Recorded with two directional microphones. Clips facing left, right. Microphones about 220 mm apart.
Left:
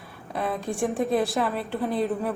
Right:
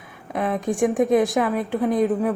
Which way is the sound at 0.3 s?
15° right (ahead or behind).